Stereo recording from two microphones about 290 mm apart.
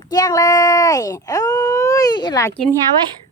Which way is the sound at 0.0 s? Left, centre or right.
Centre.